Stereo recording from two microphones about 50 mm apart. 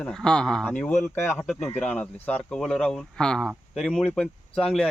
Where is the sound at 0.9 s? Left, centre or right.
Left.